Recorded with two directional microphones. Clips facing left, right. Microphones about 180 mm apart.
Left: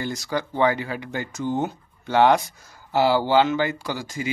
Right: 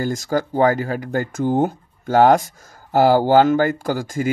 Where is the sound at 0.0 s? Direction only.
45° right (ahead or behind).